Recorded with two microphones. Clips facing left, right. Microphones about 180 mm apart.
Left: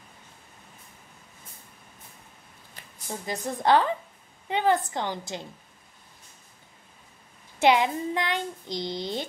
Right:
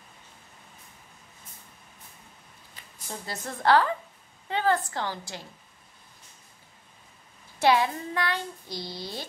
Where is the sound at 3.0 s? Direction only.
15° left (ahead or behind).